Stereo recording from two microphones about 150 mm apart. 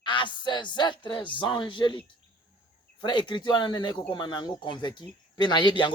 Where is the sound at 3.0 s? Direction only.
30° left (ahead or behind).